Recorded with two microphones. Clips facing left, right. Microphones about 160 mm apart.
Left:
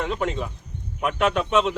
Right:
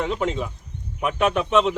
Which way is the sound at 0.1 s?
15° right (ahead or behind).